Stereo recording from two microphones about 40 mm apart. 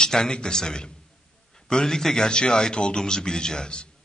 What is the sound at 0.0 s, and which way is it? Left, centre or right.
A man's voice, centre.